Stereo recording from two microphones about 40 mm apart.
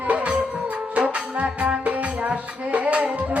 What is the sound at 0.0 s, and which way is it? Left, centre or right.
Music, right.